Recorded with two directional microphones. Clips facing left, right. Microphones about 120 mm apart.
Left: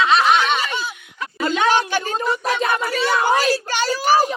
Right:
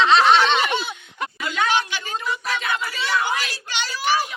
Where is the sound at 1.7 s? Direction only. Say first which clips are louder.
Left 6 dB; 45° left (ahead or behind).